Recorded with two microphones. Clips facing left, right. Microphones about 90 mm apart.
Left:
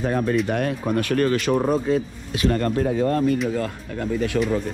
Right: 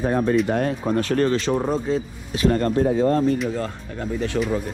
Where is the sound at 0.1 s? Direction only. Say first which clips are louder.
Right 2 dB; 40° right (ahead or behind).